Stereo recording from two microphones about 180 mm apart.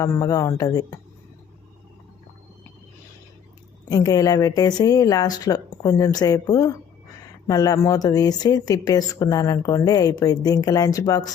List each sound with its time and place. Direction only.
0.0 s speech: 20° left (ahead or behind)
3.8 s speech: 20° left (ahead or behind)